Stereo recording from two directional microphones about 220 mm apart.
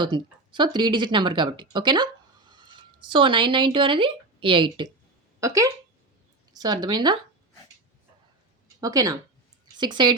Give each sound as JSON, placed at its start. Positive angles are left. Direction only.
{"t": 0.0, "sound": "a woman's voice", "side_deg": -20}
{"t": 8.8, "sound": "a woman's voice", "side_deg": -15}